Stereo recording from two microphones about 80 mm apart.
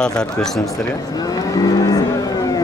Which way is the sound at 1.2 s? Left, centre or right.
Left.